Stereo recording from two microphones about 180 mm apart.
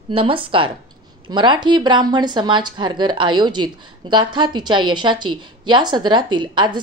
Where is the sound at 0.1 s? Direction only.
30° right (ahead or behind).